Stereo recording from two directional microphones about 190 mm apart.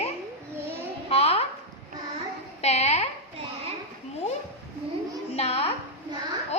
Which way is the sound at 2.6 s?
35° left (ahead or behind).